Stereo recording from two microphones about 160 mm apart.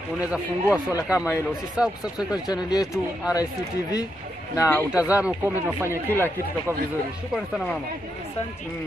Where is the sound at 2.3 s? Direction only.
25° left (ahead or behind).